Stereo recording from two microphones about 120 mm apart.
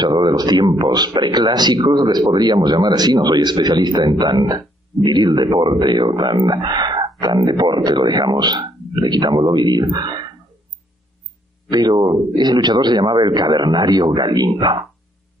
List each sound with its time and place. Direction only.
0.0 s speech: 35° right (ahead or behind)
11.7 s speech: 35° right (ahead or behind)